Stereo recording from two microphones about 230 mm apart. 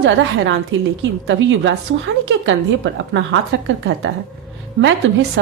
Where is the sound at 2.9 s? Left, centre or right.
Right.